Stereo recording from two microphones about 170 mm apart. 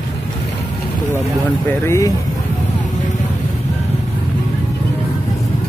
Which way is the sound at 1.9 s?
20° left (ahead or behind).